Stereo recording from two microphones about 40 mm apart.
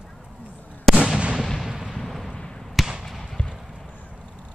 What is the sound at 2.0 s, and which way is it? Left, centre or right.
Artillery fire, centre.